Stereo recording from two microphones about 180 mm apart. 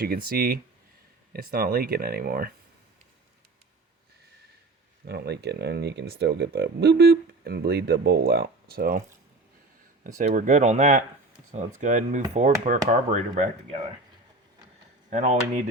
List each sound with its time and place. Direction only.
0.3 s speech: 55° right (ahead or behind)
5.0 s speech: 65° right (ahead or behind)
10.2 s speech: 45° right (ahead or behind)
15.1 s speech: 40° right (ahead or behind)